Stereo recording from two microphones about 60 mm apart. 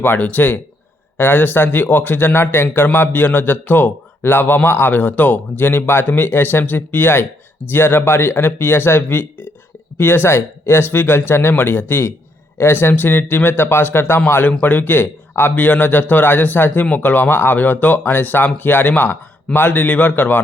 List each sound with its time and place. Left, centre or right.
0.0 s speech: left